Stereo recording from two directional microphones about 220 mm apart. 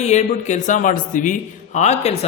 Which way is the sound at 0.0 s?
30° left (ahead or behind).